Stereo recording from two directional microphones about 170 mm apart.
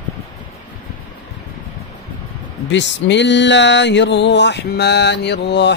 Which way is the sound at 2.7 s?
90° left.